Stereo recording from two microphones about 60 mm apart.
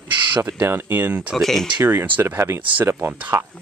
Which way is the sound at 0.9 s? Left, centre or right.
Right.